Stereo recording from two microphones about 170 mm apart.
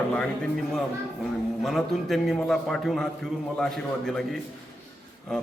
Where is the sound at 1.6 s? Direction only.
Centre (ahead or behind).